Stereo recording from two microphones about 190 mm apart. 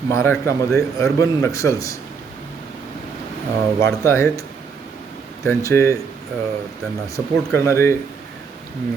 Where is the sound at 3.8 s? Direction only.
15° left (ahead or behind).